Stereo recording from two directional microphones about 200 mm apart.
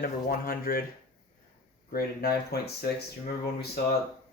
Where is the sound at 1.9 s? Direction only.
50° left (ahead or behind).